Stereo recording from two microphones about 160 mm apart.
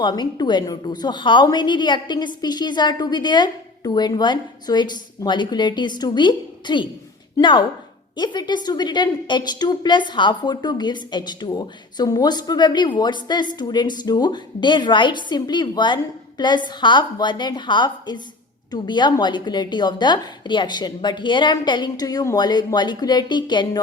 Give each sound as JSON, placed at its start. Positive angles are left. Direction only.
{"t": 0.0, "sound": "a woman's voice", "side_deg": 25}